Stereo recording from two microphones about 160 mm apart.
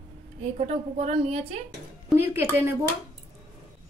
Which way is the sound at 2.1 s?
15° right (ahead or behind).